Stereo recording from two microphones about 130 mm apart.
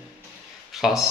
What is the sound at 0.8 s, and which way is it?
Speech, centre (ahead or behind).